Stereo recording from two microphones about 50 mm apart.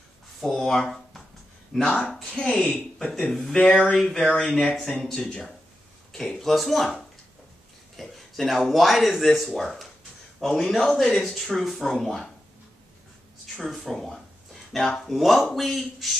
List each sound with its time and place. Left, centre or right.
0.4 s speech: centre
1.7 s speech: centre
3.6 s speech: left
3.9 s speech: centre
13.6 s speech: centre